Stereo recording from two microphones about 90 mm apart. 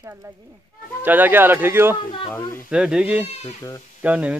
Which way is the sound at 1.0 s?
20° right (ahead or behind).